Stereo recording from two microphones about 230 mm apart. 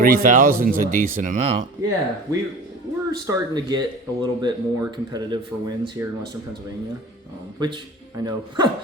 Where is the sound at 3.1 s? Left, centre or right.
Centre.